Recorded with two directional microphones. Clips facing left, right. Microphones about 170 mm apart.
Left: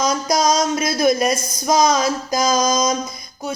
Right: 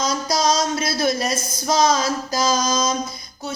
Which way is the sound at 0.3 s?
15° left (ahead or behind).